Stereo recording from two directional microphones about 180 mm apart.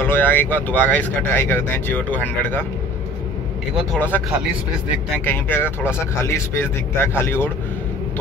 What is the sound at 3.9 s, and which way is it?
Speech, 10° left (ahead or behind).